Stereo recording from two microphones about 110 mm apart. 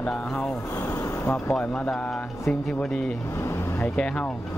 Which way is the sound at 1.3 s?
5° left (ahead or behind).